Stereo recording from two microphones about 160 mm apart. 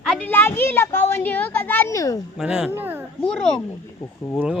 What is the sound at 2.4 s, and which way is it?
Speech, centre (ahead or behind).